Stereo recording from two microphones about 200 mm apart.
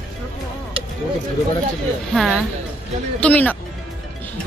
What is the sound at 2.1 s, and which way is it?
A woman's voice, centre (ahead or behind).